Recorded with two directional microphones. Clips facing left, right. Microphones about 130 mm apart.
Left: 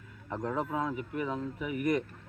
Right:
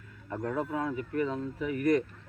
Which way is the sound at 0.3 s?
20° left (ahead or behind).